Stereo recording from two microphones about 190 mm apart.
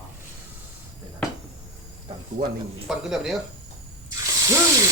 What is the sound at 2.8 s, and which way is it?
Frying, centre (ahead or behind).